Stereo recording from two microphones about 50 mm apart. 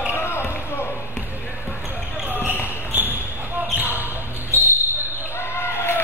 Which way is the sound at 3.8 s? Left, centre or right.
Right.